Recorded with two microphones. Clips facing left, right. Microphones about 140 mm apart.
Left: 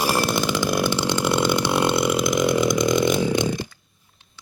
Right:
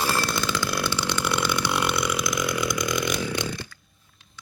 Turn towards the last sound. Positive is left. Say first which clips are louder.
# left 7 dB
turn(degrees=20)  # may be behind; listen again after turning